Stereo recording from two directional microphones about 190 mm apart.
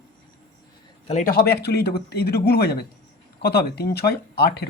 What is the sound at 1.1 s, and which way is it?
Speech, 45° left (ahead or behind).